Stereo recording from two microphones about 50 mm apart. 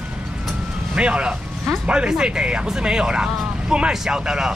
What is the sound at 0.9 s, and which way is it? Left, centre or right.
Speech, right.